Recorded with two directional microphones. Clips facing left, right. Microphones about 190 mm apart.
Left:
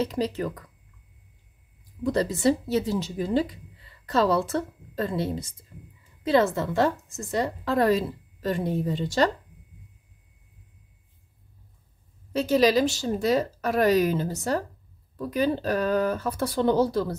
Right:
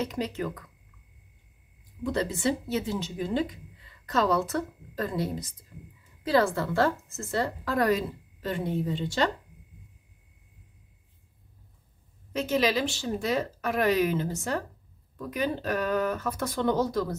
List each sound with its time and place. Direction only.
0.0 s a woman's voice: 35° left (ahead or behind)
2.0 s a woman's voice: 35° left (ahead or behind)
8.4 s a woman's voice: 40° left (ahead or behind)
12.3 s a woman's voice: 35° left (ahead or behind)